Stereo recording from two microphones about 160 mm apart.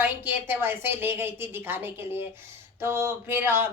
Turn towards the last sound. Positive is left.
turn(degrees=-15)  # may be behind; listen again after turning